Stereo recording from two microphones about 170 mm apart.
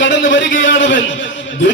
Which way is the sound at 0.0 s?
90° left.